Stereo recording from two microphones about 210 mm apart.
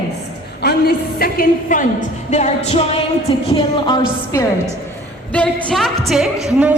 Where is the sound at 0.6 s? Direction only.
50° left (ahead or behind).